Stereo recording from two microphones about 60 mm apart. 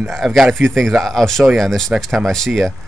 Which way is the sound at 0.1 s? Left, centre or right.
Centre.